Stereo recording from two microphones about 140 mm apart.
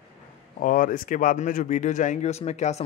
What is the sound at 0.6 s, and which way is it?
Speech, 80° left.